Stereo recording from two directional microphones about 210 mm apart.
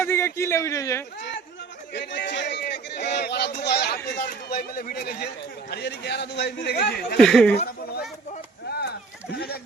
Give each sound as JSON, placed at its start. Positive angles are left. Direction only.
{"t": 0.0, "sound": "a man's voice", "side_deg": 10}
{"t": 1.9, "sound": "speech", "side_deg": 55}
{"t": 7.2, "sound": "speech", "side_deg": 5}
{"t": 7.6, "sound": "a sound", "side_deg": 45}
{"t": 9.3, "sound": "speech", "side_deg": 50}